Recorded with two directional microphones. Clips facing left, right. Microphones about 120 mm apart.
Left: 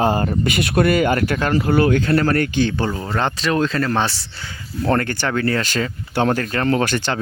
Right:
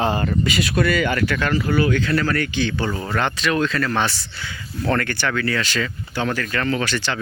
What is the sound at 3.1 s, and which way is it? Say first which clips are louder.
Speech: left 1 dB; 30° left (ahead or behind).